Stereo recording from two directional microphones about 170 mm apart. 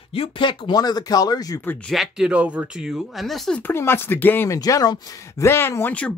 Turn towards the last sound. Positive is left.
turn(degrees=10)  # may be behind; listen again after turning